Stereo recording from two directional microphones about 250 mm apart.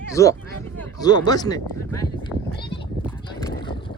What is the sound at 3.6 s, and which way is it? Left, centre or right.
Boat, centre.